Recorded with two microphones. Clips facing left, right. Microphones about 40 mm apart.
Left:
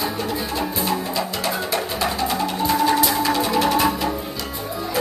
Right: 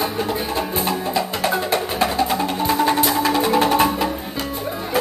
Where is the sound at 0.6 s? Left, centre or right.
Right.